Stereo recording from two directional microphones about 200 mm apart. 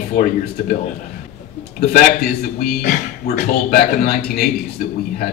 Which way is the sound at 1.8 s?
50° left (ahead or behind).